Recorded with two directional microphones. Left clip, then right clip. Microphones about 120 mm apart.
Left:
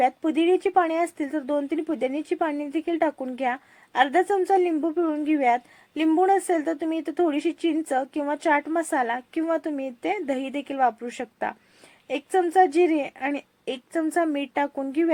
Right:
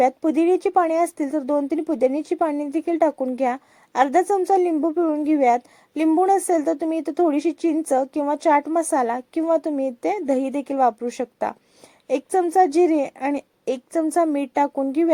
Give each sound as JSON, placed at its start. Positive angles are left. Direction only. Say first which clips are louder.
{"t": 0.0, "sound": "a woman's voice", "louder": "right 3 dB", "side_deg": -45}